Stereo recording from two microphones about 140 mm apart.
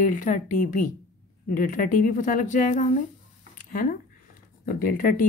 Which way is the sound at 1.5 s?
80° left.